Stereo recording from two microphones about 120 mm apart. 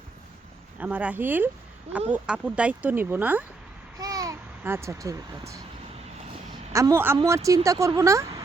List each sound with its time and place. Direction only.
0.8 s speech: 10° right (ahead or behind)
3.9 s speech: 30° right (ahead or behind)
6.7 s speech: 25° right (ahead or behind)